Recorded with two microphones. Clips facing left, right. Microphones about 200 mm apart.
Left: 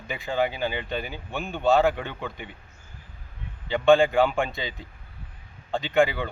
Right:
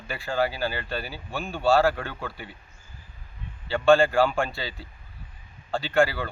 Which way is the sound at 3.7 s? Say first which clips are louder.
Left 1 dB; 15° left (ahead or behind).